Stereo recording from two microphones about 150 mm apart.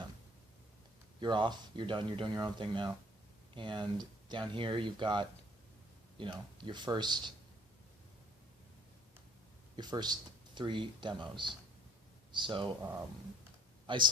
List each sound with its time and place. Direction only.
1.2 s speech: 30° right (ahead or behind)
9.7 s speech: 30° right (ahead or behind)
13.9 s speech: 35° right (ahead or behind)